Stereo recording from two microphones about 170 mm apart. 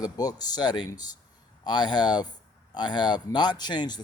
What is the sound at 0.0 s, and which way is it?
Speech, 20° left (ahead or behind).